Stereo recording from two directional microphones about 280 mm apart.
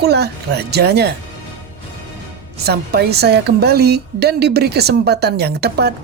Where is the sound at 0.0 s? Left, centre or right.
Right.